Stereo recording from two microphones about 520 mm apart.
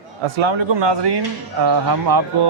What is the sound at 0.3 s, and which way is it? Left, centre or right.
Speech, right.